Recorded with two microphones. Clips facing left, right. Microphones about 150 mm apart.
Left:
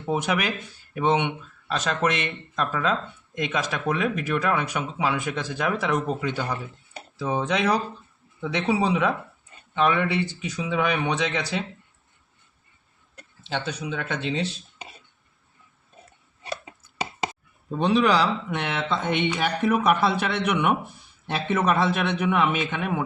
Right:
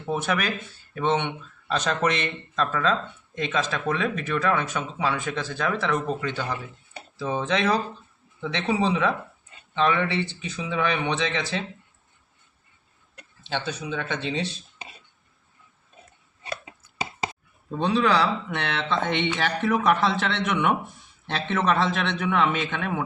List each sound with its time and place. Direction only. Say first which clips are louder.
0.1 s speech: left 1 dB; 15° left (ahead or behind)
1.6 s speech: even; centre (ahead or behind)
13.5 s speech: even; 10° left (ahead or behind)
17.7 s speech: left 2 dB; 10° left (ahead or behind)